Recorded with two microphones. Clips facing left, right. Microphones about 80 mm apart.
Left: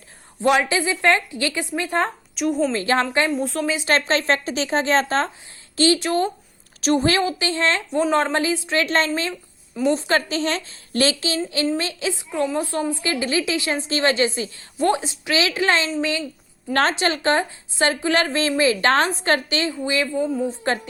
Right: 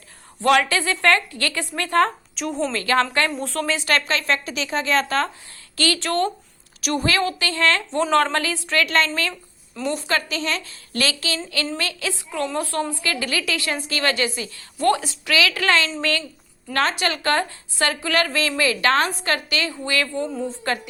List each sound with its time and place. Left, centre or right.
0.3 s a woman's voice: centre
2.3 s a woman's voice: centre
2.7 s a woman's voice: left
3.3 s a woman's voice: centre
3.8 s a woman's voice: left
6.8 s a woman's voice: left
20.1 s speech: centre